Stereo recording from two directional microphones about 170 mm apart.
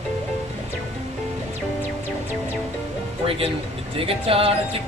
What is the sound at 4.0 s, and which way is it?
Speech, 35° right (ahead or behind).